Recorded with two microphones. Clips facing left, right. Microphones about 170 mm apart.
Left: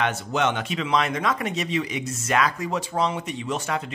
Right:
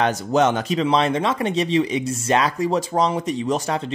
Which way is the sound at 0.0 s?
40° right (ahead or behind).